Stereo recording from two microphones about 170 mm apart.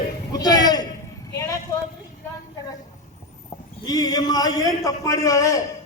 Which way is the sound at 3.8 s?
20° left (ahead or behind).